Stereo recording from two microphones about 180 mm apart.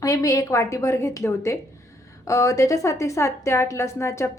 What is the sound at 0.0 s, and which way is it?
Speech, 20° left (ahead or behind).